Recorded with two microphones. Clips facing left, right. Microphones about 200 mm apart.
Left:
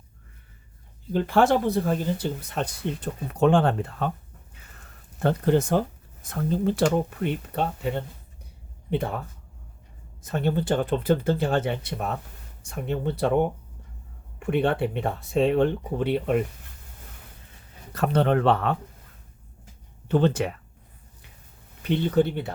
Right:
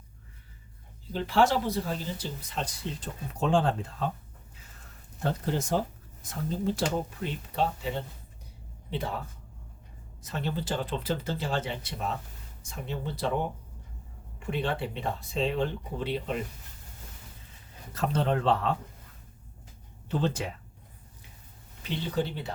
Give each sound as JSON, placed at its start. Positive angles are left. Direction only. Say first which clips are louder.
{"t": 1.1, "sound": "speech", "louder": "left 4 dB", "side_deg": 55}
{"t": 5.2, "sound": "speech", "louder": "left 9 dB", "side_deg": 60}
{"t": 10.2, "sound": "speech", "louder": "left 8 dB", "side_deg": 55}
{"t": 17.9, "sound": "speech", "louder": "left 6 dB", "side_deg": 65}
{"t": 20.1, "sound": "speech", "louder": "left 8 dB", "side_deg": 65}
{"t": 21.8, "sound": "speech", "louder": "left 9 dB", "side_deg": 60}